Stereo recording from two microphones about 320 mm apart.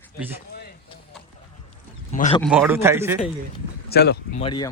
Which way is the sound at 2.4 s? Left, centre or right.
Centre.